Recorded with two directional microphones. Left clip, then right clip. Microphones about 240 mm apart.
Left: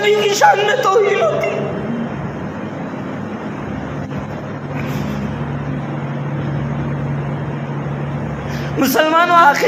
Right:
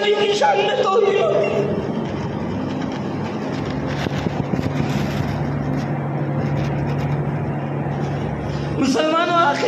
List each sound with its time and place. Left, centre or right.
0.0 s music: left
8.8 s music: left